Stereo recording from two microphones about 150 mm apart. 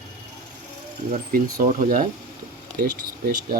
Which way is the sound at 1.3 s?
60° right (ahead or behind).